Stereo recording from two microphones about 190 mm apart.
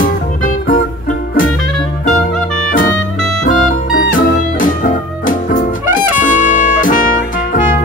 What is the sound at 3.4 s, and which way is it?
Music, 45° left (ahead or behind).